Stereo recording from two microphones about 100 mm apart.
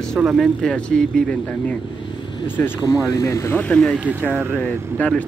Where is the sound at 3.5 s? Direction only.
15° left (ahead or behind).